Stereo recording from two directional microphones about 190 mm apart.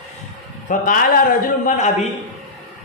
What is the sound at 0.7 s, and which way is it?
A man's voice, 45° left (ahead or behind).